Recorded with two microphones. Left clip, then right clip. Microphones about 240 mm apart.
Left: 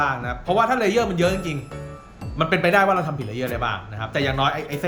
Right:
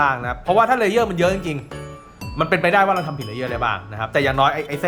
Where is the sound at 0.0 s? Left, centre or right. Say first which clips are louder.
Right 4 dB; centre.